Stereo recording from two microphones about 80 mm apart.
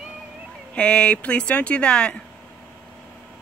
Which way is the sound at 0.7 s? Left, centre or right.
Centre.